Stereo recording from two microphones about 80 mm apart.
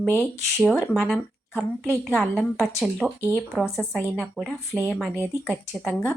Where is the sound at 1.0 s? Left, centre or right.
Centre.